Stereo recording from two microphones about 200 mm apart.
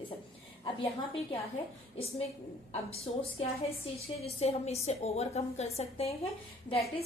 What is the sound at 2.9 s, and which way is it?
A woman's voice, 30° left (ahead or behind).